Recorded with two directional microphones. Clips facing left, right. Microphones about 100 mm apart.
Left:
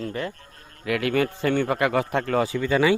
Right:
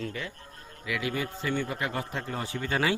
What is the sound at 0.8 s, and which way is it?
A man's voice, 60° left (ahead or behind).